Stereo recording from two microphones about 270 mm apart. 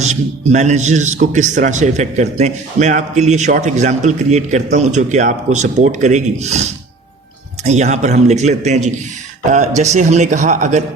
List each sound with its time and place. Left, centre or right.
0.0 s a man's voice: right